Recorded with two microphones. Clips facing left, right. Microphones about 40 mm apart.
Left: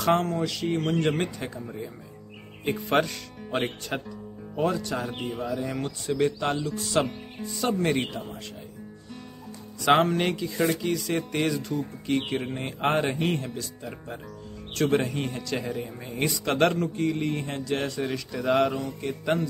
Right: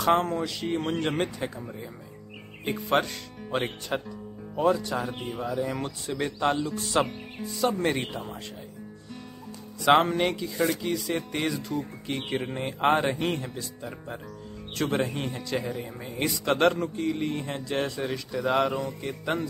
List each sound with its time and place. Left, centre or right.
0.0 s music: centre
0.9 s speech: centre
9.9 s speech: centre
14.8 s speech: centre